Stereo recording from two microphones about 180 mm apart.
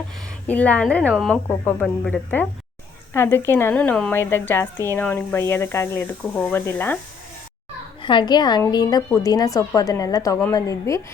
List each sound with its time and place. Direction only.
0.4 s a woman's voice: 10° left (ahead or behind)
1.5 s a woman's voice: 10° left (ahead or behind)
8.0 s a woman's voice: 25° left (ahead or behind)